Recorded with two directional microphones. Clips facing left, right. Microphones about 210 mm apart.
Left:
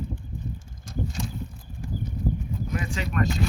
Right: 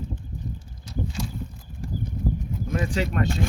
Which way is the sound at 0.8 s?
45° left (ahead or behind).